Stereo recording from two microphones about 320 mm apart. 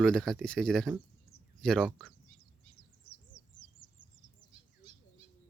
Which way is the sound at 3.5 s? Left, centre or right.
Left.